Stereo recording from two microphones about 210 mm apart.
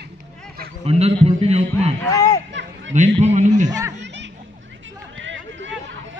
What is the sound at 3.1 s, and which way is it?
Speech, 35° right (ahead or behind).